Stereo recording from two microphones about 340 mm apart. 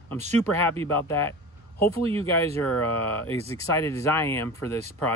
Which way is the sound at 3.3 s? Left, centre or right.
Centre.